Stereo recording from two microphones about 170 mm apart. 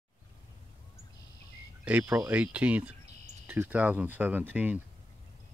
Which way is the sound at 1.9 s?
10° right (ahead or behind).